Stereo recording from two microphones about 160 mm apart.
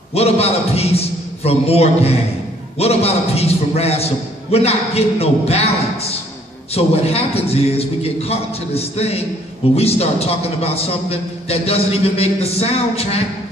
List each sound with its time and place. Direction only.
0.1 s a man's voice: 40° left (ahead or behind)
6.7 s a man's voice: 40° left (ahead or behind)